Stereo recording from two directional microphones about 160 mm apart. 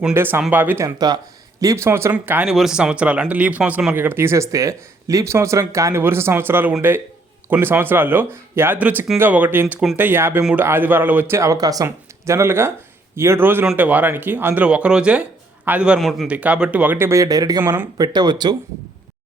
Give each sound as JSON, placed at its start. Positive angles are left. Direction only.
{"t": 0.1, "sound": "speech", "side_deg": -15}
{"t": 17.6, "sound": "speech", "side_deg": -10}
{"t": 17.9, "sound": "speech", "side_deg": -25}